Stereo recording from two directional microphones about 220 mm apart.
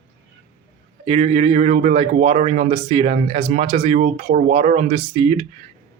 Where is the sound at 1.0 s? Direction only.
30° right (ahead or behind).